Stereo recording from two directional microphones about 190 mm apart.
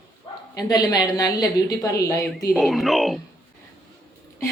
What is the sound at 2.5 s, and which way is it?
Speech, centre (ahead or behind).